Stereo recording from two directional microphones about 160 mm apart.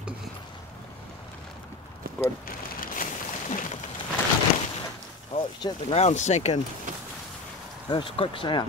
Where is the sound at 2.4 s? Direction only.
60° left (ahead or behind).